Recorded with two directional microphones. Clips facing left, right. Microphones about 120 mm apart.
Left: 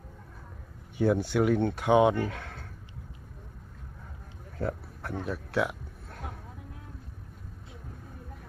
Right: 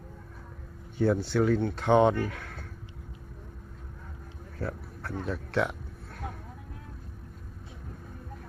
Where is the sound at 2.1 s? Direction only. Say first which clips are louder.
Left 1 dB; 20° left (ahead or behind).